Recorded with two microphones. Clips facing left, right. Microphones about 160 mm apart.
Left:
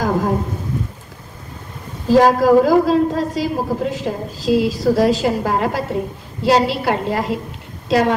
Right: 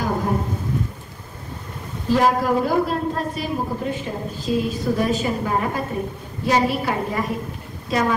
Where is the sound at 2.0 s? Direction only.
90° left.